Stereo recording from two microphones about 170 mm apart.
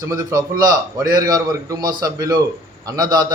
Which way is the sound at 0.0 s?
20° right (ahead or behind).